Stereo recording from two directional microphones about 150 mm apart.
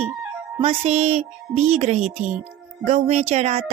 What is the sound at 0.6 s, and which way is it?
Speech, 45° right (ahead or behind).